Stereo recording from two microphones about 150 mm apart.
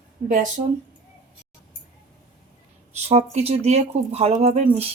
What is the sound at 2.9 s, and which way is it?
Speech, 45° right (ahead or behind).